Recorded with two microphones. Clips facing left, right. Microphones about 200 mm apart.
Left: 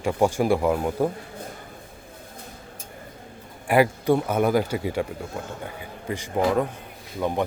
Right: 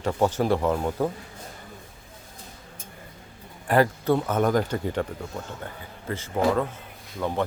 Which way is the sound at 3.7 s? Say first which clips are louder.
Left 2 dB; 10° left (ahead or behind).